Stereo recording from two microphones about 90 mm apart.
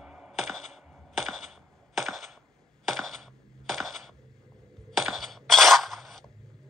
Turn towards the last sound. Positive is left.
turn(degrees=0)  # may be behind; listen again after turning